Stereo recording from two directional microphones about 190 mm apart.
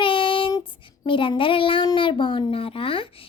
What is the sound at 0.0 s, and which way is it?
Child singing, 25° left (ahead or behind).